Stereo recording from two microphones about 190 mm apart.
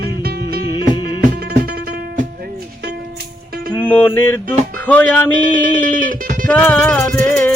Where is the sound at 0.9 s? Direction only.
25° left (ahead or behind).